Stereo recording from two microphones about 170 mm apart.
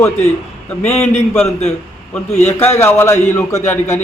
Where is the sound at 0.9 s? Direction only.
40° left (ahead or behind).